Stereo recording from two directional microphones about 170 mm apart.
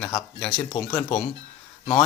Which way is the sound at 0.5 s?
25° left (ahead or behind).